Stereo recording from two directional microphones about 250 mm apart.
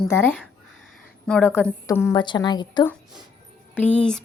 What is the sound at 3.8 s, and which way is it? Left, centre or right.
Speech, centre.